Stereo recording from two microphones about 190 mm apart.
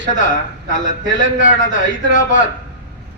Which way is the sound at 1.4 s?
45° left (ahead or behind).